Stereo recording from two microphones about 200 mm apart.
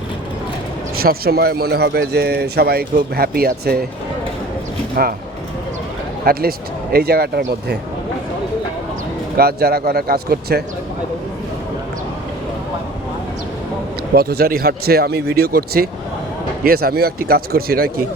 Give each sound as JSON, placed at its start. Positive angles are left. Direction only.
{"t": 0.9, "sound": "speech", "side_deg": -50}
{"t": 5.0, "sound": "speech", "side_deg": -50}
{"t": 6.3, "sound": "speech", "side_deg": -50}
{"t": 9.4, "sound": "speech", "side_deg": -50}
{"t": 14.2, "sound": "speech", "side_deg": -50}